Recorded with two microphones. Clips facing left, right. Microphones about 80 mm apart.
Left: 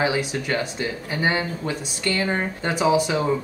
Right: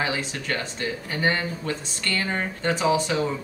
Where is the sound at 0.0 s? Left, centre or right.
Centre.